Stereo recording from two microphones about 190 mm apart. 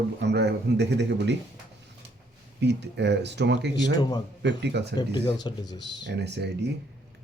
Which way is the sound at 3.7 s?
20° left (ahead or behind).